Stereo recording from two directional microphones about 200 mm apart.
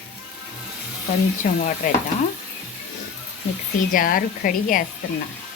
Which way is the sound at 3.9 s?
45° left (ahead or behind).